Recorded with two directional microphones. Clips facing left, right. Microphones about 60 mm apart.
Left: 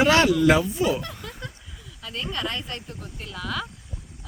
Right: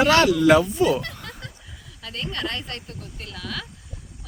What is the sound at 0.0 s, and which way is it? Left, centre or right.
Speech, centre.